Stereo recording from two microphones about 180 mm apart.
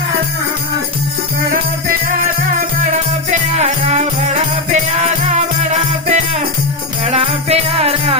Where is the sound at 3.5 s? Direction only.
40° right (ahead or behind).